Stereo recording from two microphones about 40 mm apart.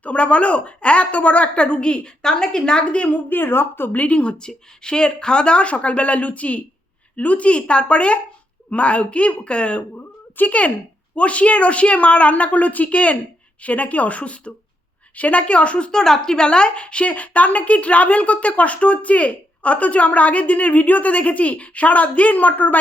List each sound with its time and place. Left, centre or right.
0.0 s a woman's voice: left
3.2 s a woman's voice: left
3.9 s a woman's voice: left
4.2 s a woman's voice: left
15.9 s a woman's voice: centre; by 22.8 s left